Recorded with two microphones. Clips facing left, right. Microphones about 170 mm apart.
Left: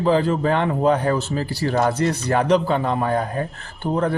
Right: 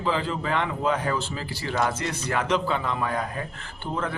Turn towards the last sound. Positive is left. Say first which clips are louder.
# left 8 dB
turn(degrees=40)  # may be behind; listen again after turning